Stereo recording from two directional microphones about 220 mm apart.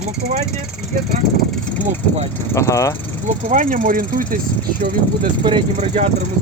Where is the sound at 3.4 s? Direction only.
35° right (ahead or behind).